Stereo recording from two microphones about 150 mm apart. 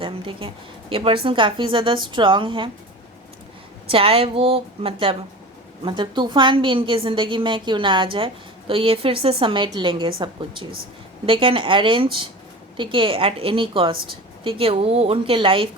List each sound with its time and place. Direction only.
0.0 s a woman's voice: 35° right (ahead or behind)
3.8 s a woman's voice: 40° right (ahead or behind)
11.3 s a woman's voice: 35° right (ahead or behind)